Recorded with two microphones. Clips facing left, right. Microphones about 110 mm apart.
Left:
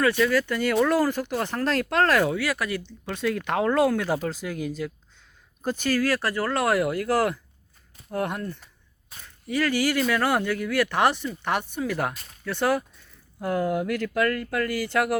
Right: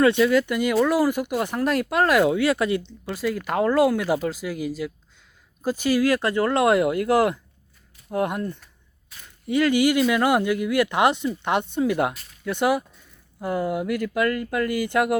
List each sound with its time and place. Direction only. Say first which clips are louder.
0.0 s speech: right 4 dB; 20° right (ahead or behind)
3.1 s speech: right 1 dB; 5° right (ahead or behind); by 15.2 s 20° right (ahead or behind)